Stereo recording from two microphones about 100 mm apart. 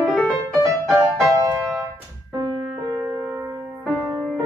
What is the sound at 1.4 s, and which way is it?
Music, 35° right (ahead or behind).